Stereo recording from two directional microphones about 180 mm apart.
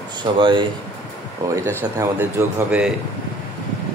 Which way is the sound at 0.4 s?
25° right (ahead or behind).